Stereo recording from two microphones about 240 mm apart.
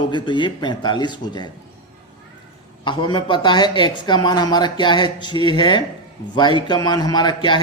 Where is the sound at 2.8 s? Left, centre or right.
Centre.